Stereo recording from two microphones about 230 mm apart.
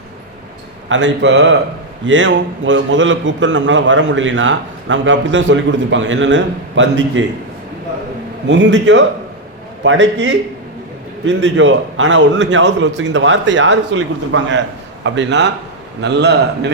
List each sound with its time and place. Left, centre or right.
0.9 s a man's voice: right
8.4 s a man's voice: right